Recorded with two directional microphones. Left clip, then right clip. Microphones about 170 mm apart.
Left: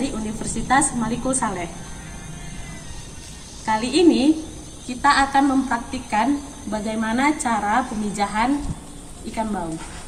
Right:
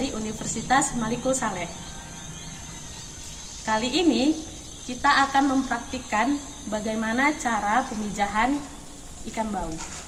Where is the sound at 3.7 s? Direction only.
50° right (ahead or behind).